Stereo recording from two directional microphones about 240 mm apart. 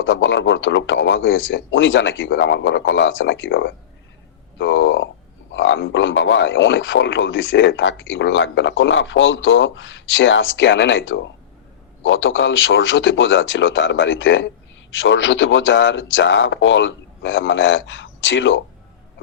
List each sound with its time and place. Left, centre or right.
0.0 s speech: left